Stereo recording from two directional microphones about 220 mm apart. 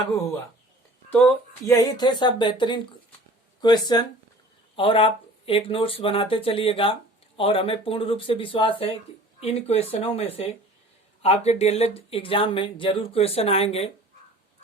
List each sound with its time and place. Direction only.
1.1 s speech: 10° left (ahead or behind); by 13.9 s 25° left (ahead or behind)